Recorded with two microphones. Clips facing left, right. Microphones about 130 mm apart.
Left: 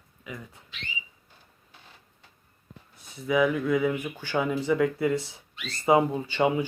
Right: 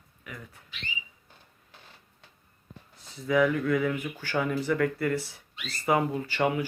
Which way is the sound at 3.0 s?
15° left (ahead or behind).